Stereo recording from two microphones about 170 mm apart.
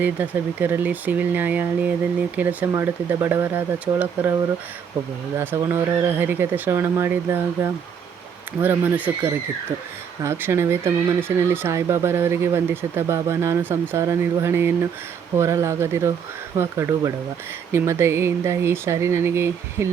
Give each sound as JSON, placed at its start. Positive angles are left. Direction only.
{"t": 0.0, "sound": "speech", "side_deg": -10}
{"t": 5.4, "sound": "speech", "side_deg": -15}